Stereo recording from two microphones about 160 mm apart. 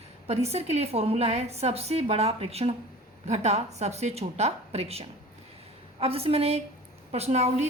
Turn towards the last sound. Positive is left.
turn(degrees=-45)  # may be behind; listen again after turning